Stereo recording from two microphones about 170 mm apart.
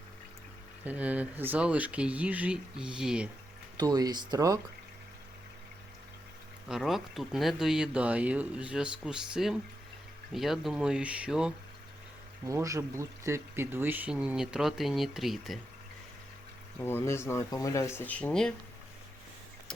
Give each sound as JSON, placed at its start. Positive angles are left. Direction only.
{"t": 0.9, "sound": "speech", "side_deg": -10}
{"t": 3.8, "sound": "speech", "side_deg": -20}
{"t": 6.7, "sound": "speech", "side_deg": 0}
{"t": 12.5, "sound": "speech", "side_deg": -20}
{"t": 16.8, "sound": "speech", "side_deg": 15}